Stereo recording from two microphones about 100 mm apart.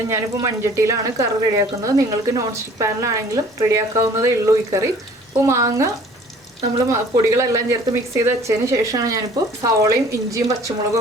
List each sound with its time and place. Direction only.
0.1 s speech: 30° right (ahead or behind)